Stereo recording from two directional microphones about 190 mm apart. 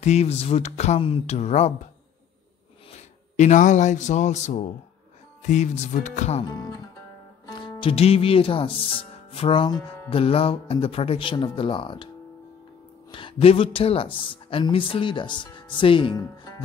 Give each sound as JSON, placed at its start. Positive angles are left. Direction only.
{"t": 0.0, "sound": "speech", "side_deg": 35}
{"t": 3.3, "sound": "speech", "side_deg": 40}
{"t": 7.4, "sound": "speech", "side_deg": 25}
{"t": 13.1, "sound": "speech", "side_deg": 25}